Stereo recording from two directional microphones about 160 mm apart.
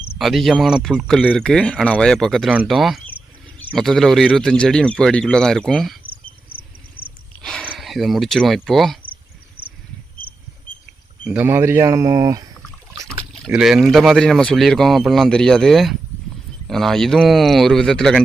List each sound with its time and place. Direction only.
0.2 s speech: centre (ahead or behind)
7.4 s a sound: 5° left (ahead or behind)
7.7 s speech: centre (ahead or behind)
11.2 s speech: 5° right (ahead or behind); by 12.5 s 20° right (ahead or behind)
13.1 s speech: centre (ahead or behind)